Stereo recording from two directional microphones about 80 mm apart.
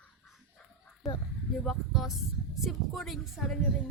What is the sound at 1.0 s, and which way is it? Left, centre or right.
Speech, centre.